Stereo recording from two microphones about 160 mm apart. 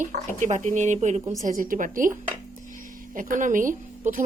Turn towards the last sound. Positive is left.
turn(degrees=-55)  # may be behind; listen again after turning